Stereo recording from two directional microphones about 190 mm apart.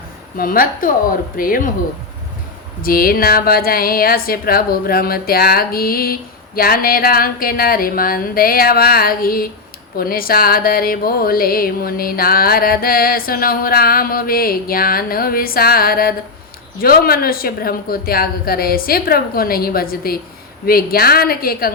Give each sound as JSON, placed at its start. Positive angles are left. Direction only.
{"t": 0.3, "sound": "music", "side_deg": 50}
{"t": 2.8, "sound": "music", "side_deg": 50}